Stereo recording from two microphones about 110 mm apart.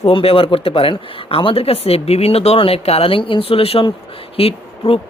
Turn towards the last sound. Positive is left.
turn(degrees=60)  # may be behind; listen again after turning